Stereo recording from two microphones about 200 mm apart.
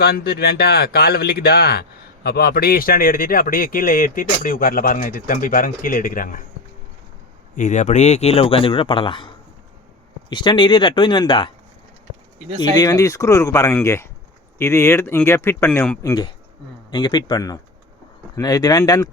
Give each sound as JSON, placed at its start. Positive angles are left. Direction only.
{"t": 0.0, "sound": "speech", "side_deg": 50}
{"t": 7.5, "sound": "speech", "side_deg": 40}
{"t": 12.5, "sound": "speech", "side_deg": 20}